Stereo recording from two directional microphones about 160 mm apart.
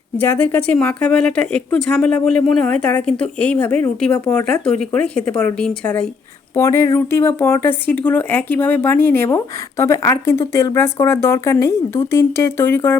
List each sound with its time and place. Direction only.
0.2 s speech: 10° left (ahead or behind)
6.6 s speech: 20° left (ahead or behind)